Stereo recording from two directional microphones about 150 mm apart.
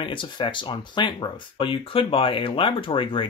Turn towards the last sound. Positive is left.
turn(degrees=35)  # may be behind; listen again after turning